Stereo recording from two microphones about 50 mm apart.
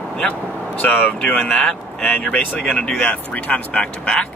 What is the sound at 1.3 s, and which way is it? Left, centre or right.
Speech, left.